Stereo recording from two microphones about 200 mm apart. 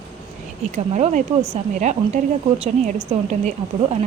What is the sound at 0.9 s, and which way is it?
Speech, 35° right (ahead or behind).